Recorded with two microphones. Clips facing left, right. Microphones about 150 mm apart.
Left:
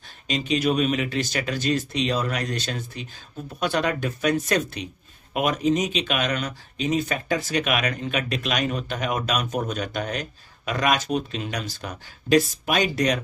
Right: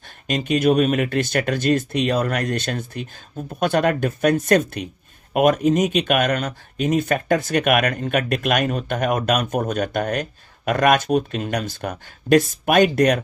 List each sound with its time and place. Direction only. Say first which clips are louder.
0.3 s speech: right 5 dB; 50° right (ahead or behind)